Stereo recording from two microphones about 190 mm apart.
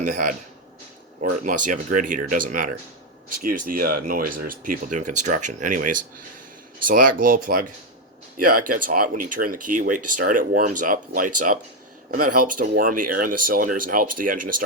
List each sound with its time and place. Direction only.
0.0 s speech: 45° right (ahead or behind)